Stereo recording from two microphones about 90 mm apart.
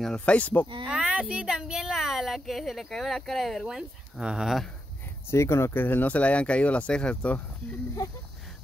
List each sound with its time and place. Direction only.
0.0 s speech: 10° left (ahead or behind)
0.8 s a sound: 10° right (ahead or behind)
1.3 s speech: 10° right (ahead or behind)
5.3 s speech: 30° left (ahead or behind); by 7.4 s 15° left (ahead or behind)